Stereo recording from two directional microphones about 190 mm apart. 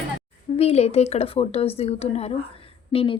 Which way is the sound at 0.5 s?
35° left (ahead or behind).